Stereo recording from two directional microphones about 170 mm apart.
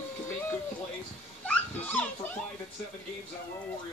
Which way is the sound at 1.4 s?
10° left (ahead or behind).